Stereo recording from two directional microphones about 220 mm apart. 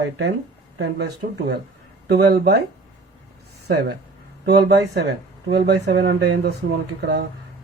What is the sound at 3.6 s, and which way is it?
Speech, 50° right (ahead or behind).